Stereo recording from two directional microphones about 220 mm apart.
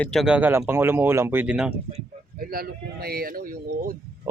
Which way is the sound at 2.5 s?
45° right (ahead or behind).